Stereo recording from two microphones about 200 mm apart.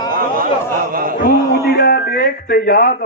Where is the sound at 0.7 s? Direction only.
45° right (ahead or behind).